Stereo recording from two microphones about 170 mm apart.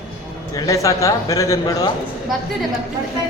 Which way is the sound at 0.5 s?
20° left (ahead or behind).